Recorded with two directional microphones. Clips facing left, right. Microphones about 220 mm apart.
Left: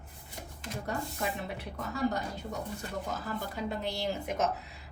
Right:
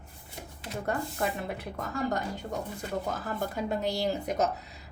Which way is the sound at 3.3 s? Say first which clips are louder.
Right 4 dB; 45° right (ahead or behind).